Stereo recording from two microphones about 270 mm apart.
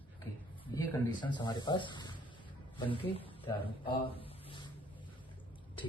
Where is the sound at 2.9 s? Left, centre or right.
Centre.